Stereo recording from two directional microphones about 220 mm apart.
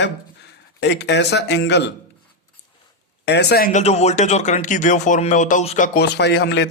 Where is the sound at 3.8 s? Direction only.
30° left (ahead or behind).